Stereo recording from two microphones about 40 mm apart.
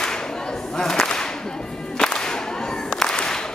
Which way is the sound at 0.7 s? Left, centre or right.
Centre.